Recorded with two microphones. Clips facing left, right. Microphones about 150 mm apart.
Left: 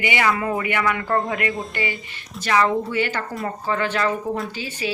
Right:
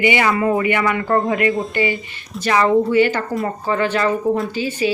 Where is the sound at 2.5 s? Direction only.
15° right (ahead or behind).